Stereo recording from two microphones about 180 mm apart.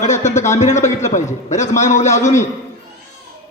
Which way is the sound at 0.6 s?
40° left (ahead or behind).